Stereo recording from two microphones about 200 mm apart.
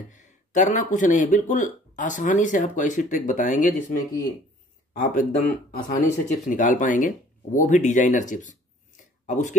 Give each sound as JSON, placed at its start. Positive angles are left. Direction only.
{"t": 0.1, "sound": "speech", "side_deg": 35}